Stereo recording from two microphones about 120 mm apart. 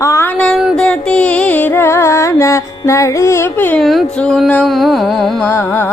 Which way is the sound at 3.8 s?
Centre (ahead or behind).